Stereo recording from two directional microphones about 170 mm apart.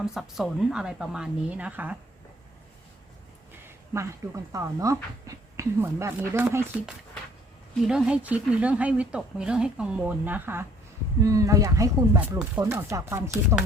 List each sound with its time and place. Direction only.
0.0 s a woman's voice: centre (ahead or behind)
4.5 s speech: 20° right (ahead or behind)
7.9 s speech: 5° right (ahead or behind)
12.2 s speech: 10° right (ahead or behind)